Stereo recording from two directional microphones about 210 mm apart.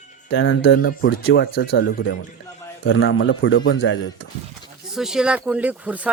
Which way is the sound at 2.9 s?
70° left (ahead or behind).